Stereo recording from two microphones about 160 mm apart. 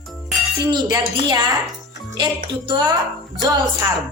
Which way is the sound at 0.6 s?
25° right (ahead or behind).